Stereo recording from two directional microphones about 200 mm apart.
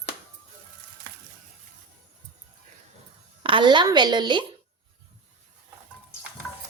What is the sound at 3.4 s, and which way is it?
Speech, 25° right (ahead or behind).